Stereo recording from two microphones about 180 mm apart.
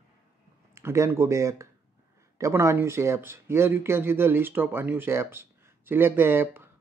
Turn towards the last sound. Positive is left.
turn(degrees=-10)  # may be behind; listen again after turning